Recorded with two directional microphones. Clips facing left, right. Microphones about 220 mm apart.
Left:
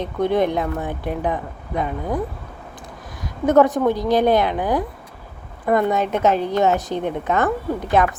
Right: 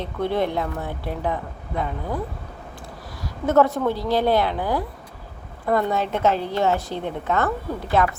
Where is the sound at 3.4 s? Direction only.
15° left (ahead or behind).